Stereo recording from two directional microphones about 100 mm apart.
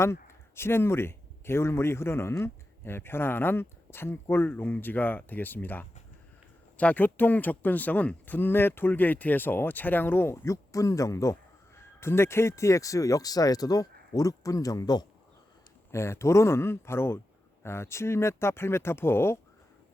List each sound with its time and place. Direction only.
0.0 s speech: 25° left (ahead or behind)
15.9 s speech: 25° left (ahead or behind)